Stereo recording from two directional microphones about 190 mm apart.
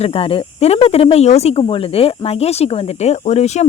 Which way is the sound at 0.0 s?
30° left (ahead or behind).